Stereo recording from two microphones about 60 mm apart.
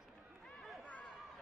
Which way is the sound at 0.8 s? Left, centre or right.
Left.